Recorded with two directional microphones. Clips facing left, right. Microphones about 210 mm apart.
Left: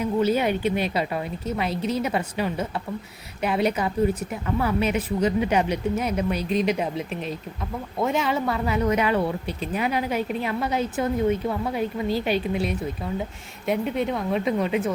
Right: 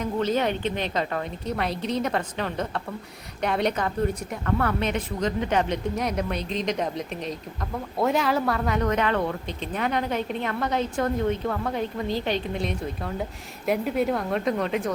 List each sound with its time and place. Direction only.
0.0 s a woman's voice: 10° left (ahead or behind)